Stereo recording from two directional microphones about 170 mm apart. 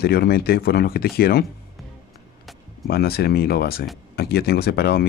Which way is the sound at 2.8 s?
65° left (ahead or behind).